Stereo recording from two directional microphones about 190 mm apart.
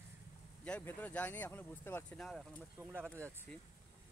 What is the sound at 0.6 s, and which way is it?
Speech, 5° left (ahead or behind).